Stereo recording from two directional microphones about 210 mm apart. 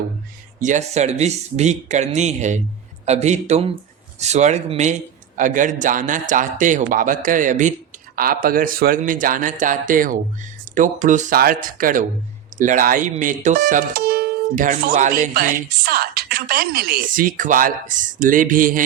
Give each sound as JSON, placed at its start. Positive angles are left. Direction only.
{"t": 0.6, "sound": "speech", "side_deg": -35}